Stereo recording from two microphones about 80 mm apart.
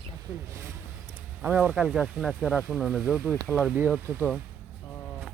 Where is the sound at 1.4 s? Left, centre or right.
Right.